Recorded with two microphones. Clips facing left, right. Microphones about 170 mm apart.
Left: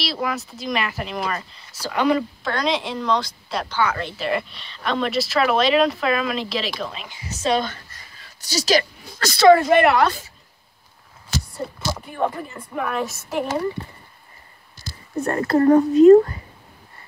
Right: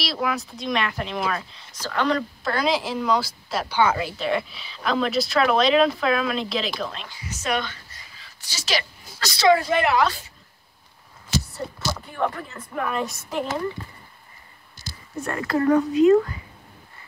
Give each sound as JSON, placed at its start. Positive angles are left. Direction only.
{"t": 0.0, "sound": "speech", "side_deg": 0}
{"t": 2.4, "sound": "speech", "side_deg": -5}
{"t": 3.7, "sound": "speech", "side_deg": -15}
{"t": 4.0, "sound": "speech", "side_deg": 0}
{"t": 7.2, "sound": "a woman's voice", "side_deg": 30}
{"t": 7.6, "sound": "speech", "side_deg": 45}
{"t": 11.5, "sound": "speech", "side_deg": 15}
{"t": 15.2, "sound": "a woman's voice", "side_deg": 40}